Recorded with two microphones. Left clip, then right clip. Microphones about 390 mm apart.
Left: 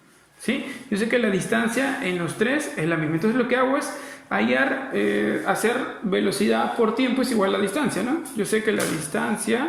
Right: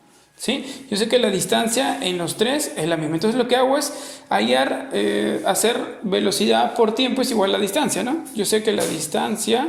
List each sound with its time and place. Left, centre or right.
0.4 s speech: right